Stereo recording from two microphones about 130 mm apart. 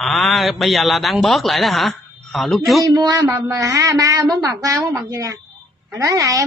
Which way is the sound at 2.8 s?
30° right (ahead or behind).